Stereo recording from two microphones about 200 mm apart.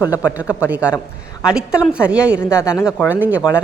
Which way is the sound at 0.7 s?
5° right (ahead or behind).